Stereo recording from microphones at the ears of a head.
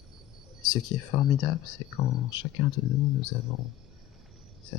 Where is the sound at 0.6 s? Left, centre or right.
Left.